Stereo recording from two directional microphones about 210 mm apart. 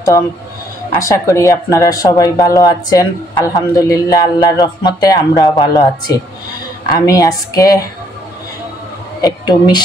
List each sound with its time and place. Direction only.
0.9 s speech: 15° left (ahead or behind)
9.2 s speech: 20° left (ahead or behind)